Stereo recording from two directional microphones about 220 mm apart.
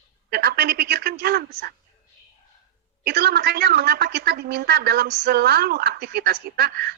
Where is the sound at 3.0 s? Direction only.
45° right (ahead or behind).